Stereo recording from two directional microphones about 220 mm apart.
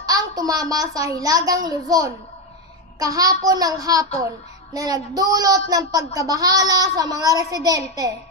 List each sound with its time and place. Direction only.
0.0 s a child's voice: 15° right (ahead or behind)